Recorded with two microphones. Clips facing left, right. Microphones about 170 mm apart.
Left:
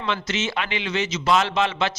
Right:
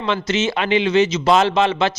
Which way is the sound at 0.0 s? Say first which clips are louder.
Right 6 dB; 25° right (ahead or behind).